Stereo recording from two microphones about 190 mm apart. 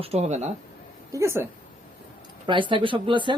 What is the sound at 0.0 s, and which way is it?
Speech, 35° right (ahead or behind).